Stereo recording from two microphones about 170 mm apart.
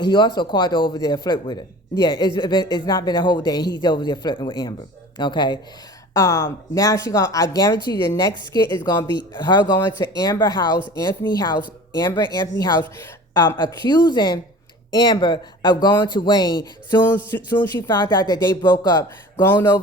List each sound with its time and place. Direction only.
0.0 s a man's voice: 25° left (ahead or behind)